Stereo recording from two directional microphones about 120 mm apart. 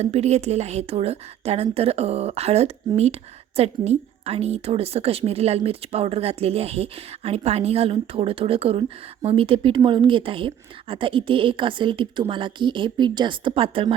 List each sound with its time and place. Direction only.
0.0 s a woman's voice: 65° right (ahead or behind); by 13.9 s 45° right (ahead or behind)